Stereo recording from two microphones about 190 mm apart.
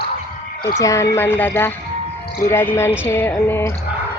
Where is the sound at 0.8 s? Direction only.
15° left (ahead or behind).